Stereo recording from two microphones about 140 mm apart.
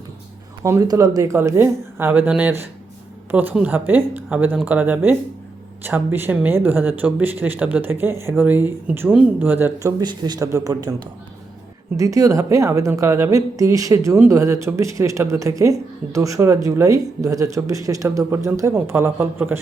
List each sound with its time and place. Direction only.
0.6 s speech: 25° right (ahead or behind)
10.0 s a woman's voice: 30° right (ahead or behind)
11.9 s a woman's voice: 25° right (ahead or behind)